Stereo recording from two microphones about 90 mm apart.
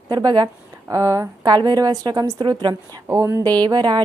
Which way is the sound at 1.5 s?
50° right (ahead or behind).